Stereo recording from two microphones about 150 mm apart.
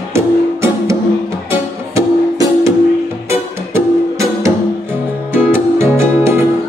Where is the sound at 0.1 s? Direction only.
20° right (ahead or behind).